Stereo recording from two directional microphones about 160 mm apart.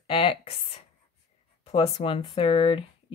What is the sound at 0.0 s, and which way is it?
Speech, 35° left (ahead or behind).